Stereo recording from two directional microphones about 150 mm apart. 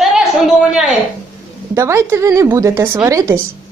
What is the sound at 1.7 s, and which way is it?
A woman's voice, 20° right (ahead or behind).